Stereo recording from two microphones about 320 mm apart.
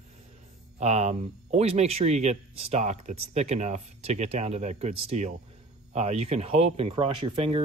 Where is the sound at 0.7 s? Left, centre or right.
Right.